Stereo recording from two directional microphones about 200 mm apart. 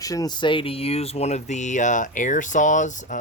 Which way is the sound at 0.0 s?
15° left (ahead or behind).